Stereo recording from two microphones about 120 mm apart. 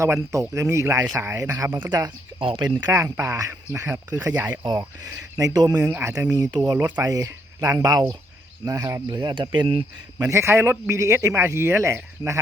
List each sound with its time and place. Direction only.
0.0 s speech: 25° right (ahead or behind)
1.9 s speech: 35° right (ahead or behind)
2.8 s speech: 25° right (ahead or behind); by 9.8 s 45° right (ahead or behind)
10.2 s speech: 25° right (ahead or behind)